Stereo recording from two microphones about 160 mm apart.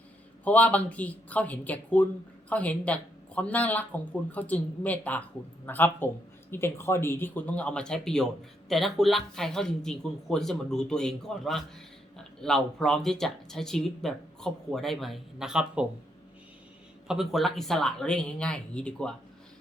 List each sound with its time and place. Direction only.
0.4 s speech: 10° left (ahead or behind)
17.1 s speech: centre (ahead or behind)